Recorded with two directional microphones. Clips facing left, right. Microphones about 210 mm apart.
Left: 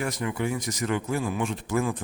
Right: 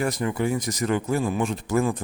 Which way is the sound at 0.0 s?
35° right (ahead or behind).